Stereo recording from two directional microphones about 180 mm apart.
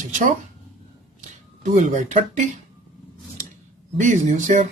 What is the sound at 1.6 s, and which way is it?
Speech, 40° right (ahead or behind).